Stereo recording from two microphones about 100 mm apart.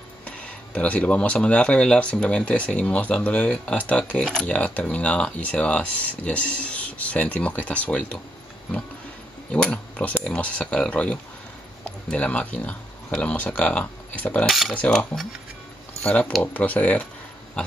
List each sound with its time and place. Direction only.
0.7 s speech: 15° left (ahead or behind)
9.5 s speech: 10° left (ahead or behind)